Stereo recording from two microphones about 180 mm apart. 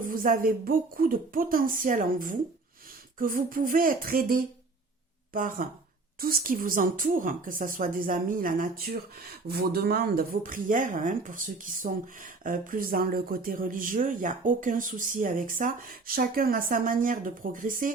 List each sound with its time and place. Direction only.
0.0 s speech: 50° right (ahead or behind)